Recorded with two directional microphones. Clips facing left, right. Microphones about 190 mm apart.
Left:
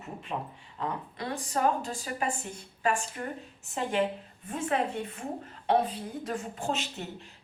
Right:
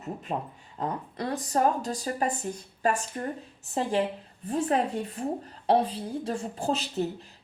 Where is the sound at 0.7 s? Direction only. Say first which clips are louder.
Right 3 dB; 40° right (ahead or behind).